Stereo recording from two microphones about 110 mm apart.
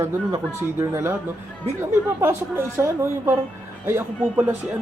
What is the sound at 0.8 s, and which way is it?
A woman's voice, 25° right (ahead or behind).